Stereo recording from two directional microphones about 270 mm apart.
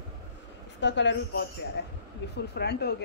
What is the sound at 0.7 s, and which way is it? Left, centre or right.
Speech, left.